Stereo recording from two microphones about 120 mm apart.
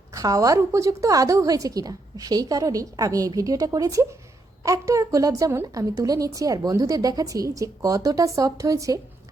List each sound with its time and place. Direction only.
0.1 s a woman's voice: 30° right (ahead or behind)